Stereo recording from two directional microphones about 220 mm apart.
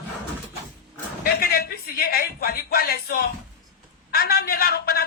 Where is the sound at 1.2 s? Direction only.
40° left (ahead or behind).